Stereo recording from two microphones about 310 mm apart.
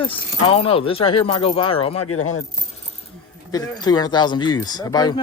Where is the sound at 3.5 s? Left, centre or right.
Centre.